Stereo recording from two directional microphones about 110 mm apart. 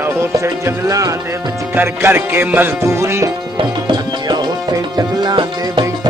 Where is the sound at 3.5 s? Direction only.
45° right (ahead or behind).